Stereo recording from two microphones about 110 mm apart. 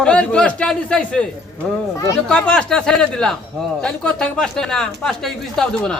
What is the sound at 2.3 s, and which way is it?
A man's voice, 10° left (ahead or behind).